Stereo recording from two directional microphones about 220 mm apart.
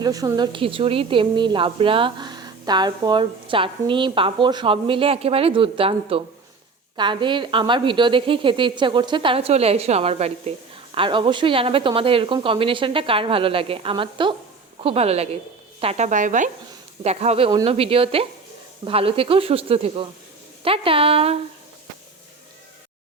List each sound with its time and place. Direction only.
0.0 s a woman's voice: 15° right (ahead or behind)